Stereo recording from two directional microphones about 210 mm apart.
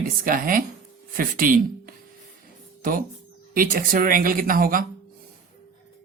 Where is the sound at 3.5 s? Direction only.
40° right (ahead or behind).